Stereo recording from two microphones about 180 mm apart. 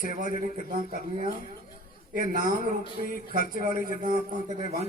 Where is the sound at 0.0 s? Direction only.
50° right (ahead or behind).